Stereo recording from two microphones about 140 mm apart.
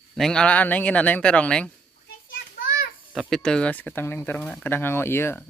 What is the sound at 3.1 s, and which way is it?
Speech, centre (ahead or behind).